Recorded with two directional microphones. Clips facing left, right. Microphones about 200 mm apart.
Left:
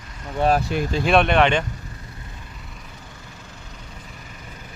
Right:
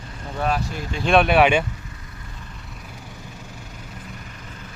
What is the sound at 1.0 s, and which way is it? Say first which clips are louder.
Speech: right 2 dB; centre (ahead or behind).